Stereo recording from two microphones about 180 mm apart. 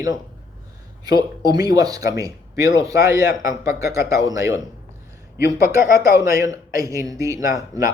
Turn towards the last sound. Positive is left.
turn(degrees=-20)  # may be behind; listen again after turning